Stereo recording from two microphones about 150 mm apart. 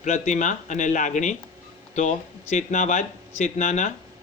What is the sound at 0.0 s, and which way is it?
A man's voice, 55° left (ahead or behind).